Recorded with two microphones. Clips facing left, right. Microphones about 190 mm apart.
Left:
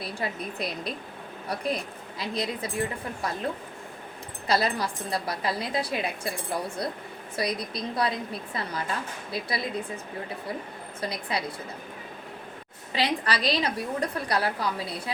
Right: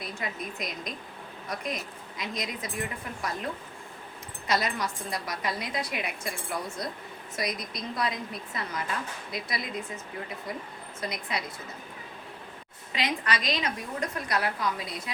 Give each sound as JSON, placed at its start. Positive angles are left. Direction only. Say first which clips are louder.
{"t": 0.0, "sound": "a woman's voice", "louder": "left 3 dB", "side_deg": 30}
{"t": 4.4, "sound": "a woman's voice", "louder": "left 3 dB", "side_deg": 30}
{"t": 11.0, "sound": "a woman's voice", "louder": "left 3 dB", "side_deg": 30}
{"t": 12.9, "sound": "a woman's voice", "louder": "left 3 dB", "side_deg": 30}